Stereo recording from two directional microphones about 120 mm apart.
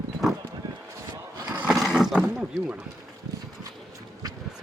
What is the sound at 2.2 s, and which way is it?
Speech, 10° right (ahead or behind).